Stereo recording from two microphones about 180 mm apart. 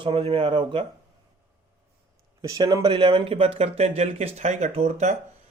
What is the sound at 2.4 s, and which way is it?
Speech, 20° right (ahead or behind).